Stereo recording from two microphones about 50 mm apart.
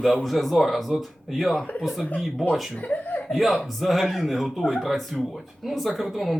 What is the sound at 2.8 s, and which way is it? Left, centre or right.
Speech, left.